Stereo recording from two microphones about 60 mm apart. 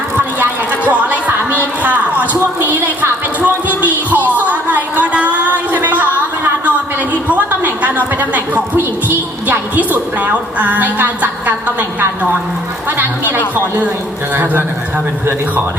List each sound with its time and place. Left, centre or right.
0.9 s music: right
4.1 s a sound: right
7.1 s a woman's voice: right